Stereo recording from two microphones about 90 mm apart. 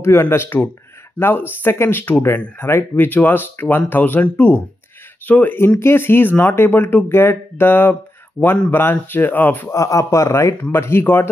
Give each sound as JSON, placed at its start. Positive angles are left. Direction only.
{"t": 0.0, "sound": "speech", "side_deg": 30}
{"t": 9.7, "sound": "speech", "side_deg": 35}